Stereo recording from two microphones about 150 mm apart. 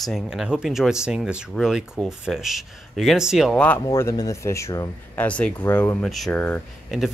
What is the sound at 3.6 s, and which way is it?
Speech, 15° left (ahead or behind).